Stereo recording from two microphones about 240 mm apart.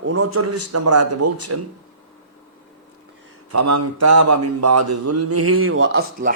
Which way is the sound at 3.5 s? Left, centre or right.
Right.